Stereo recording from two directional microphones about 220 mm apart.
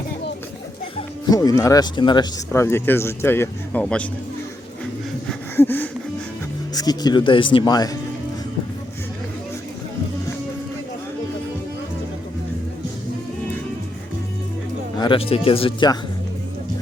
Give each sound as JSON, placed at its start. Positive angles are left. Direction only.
{"t": 1.3, "sound": "speech", "side_deg": 15}
{"t": 5.3, "sound": "a sound", "side_deg": 10}
{"t": 6.7, "sound": "speech", "side_deg": 20}
{"t": 14.9, "sound": "speech", "side_deg": 20}